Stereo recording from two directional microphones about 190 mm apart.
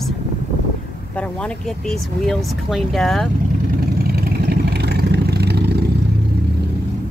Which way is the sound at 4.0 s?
55° right (ahead or behind).